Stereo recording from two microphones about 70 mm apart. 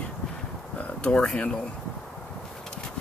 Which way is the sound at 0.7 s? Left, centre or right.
Centre.